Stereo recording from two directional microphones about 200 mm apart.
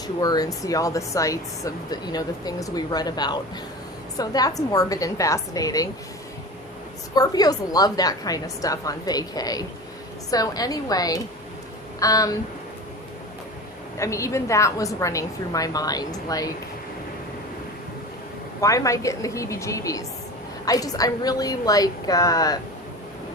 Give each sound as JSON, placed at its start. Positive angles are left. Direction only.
{"t": 0.2, "sound": "a woman's voice", "side_deg": 20}
{"t": 7.2, "sound": "a woman's voice", "side_deg": 20}
{"t": 14.0, "sound": "a woman's voice", "side_deg": 15}
{"t": 18.6, "sound": "a woman's voice", "side_deg": 15}